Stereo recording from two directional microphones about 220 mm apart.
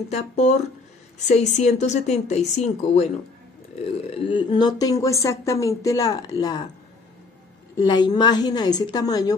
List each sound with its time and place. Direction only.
0.1 s speech: 30° left (ahead or behind)
4.2 s speech: 20° left (ahead or behind)
7.7 s a woman's voice: 20° left (ahead or behind)